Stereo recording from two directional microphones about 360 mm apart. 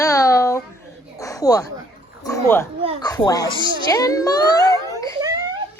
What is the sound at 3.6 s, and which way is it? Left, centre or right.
Speech, centre.